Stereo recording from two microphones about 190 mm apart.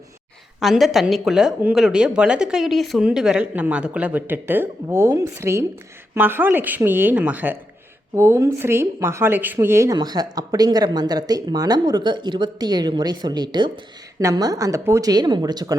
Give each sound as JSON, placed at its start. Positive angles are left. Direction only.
{"t": 0.6, "sound": "speech", "side_deg": 0}